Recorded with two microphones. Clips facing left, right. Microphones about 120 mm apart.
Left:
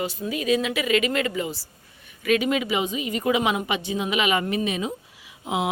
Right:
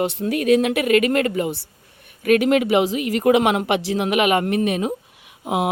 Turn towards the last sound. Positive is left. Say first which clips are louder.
# right 4 dB
turn(degrees=-55)  # may be behind; listen again after turning